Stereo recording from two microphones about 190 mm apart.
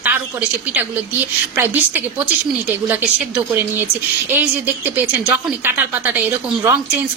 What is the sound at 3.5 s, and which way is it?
A woman's voice, 10° right (ahead or behind).